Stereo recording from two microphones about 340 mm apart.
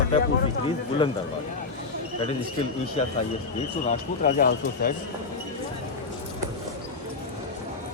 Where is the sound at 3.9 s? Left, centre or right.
Left.